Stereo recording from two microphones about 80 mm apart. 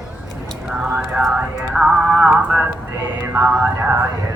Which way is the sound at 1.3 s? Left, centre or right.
Centre.